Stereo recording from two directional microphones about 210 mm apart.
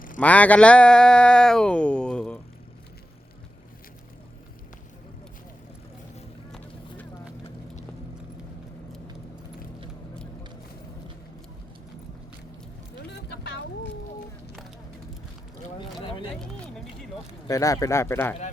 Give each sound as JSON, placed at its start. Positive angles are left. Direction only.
{"t": 0.2, "sound": "speech", "side_deg": 5}
{"t": 6.5, "sound": "vehicle", "side_deg": 5}
{"t": 13.1, "sound": "a sound", "side_deg": 55}
{"t": 17.5, "sound": "speech", "side_deg": 15}